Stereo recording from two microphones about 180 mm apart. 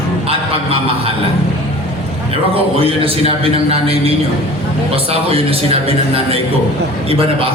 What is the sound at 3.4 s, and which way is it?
A man's voice, 35° right (ahead or behind).